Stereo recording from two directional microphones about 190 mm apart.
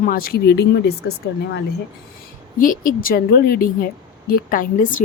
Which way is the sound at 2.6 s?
45° left (ahead or behind).